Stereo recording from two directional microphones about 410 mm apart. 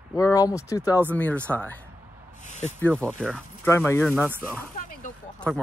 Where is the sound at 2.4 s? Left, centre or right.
Centre.